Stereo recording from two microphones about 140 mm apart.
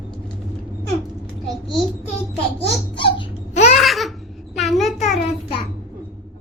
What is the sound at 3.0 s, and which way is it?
Dog, 40° left (ahead or behind).